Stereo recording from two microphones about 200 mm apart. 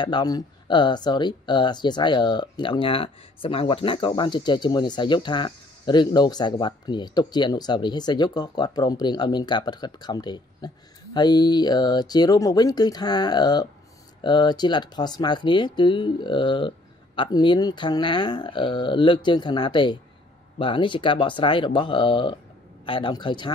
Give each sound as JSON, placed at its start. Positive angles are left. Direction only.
{"t": 0.0, "sound": "speech", "side_deg": 20}